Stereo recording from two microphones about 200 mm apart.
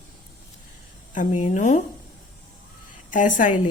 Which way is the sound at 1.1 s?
40° left (ahead or behind).